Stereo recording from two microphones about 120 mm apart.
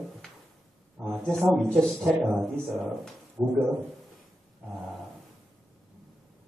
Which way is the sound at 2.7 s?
Centre (ahead or behind).